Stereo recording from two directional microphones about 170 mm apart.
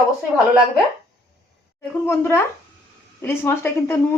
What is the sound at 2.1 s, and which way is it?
A woman's voice, 15° left (ahead or behind).